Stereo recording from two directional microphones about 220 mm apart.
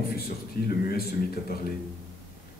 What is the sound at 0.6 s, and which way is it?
A man's voice, 45° left (ahead or behind).